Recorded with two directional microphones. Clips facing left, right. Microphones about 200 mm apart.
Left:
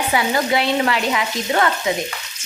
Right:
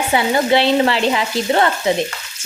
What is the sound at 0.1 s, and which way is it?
Frying, 30° right (ahead or behind).